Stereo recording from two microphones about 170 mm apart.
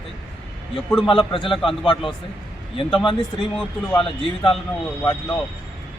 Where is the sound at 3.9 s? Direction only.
30° left (ahead or behind).